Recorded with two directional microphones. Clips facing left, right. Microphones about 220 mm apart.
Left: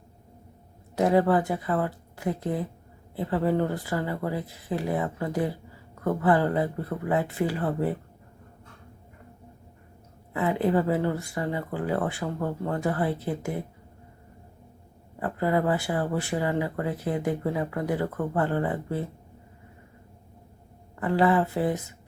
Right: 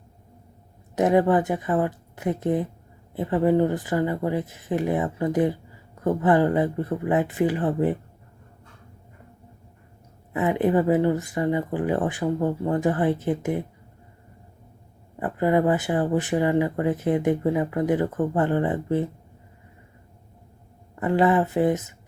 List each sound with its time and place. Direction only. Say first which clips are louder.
0.9 s speech: right 2 dB; 20° right (ahead or behind)
10.3 s speech: right 3 dB; 20° right (ahead or behind)
15.2 s speech: right 4 dB; 20° right (ahead or behind)
20.9 s speech: right 2 dB; 20° right (ahead or behind)